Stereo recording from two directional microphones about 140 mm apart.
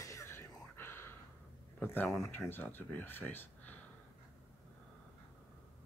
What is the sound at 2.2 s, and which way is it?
Speech, 15° left (ahead or behind).